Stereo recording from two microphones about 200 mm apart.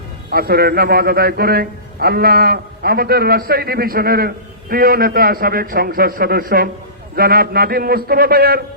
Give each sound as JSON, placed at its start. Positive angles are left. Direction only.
{"t": 0.3, "sound": "a man's voice", "side_deg": -50}